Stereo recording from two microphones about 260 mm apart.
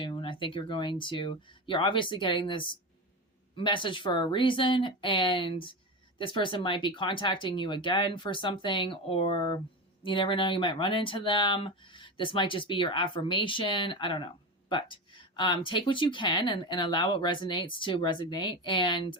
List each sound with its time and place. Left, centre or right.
0.0 s speech: centre